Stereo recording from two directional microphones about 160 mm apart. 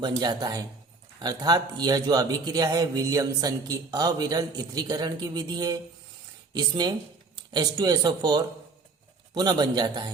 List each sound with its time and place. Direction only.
0.0 s a man's voice: 25° right (ahead or behind)